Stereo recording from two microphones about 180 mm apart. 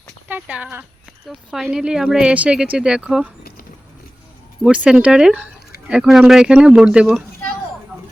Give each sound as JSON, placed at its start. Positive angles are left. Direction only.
{"t": 0.3, "sound": "speech", "side_deg": -10}
{"t": 1.3, "sound": "speech", "side_deg": 0}
{"t": 4.6, "sound": "speech", "side_deg": -5}